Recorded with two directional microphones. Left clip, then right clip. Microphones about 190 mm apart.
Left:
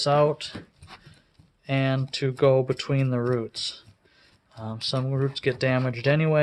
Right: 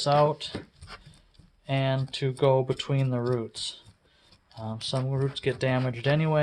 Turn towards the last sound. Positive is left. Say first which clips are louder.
# left 3 dB
turn(degrees=35)  # may be behind; listen again after turning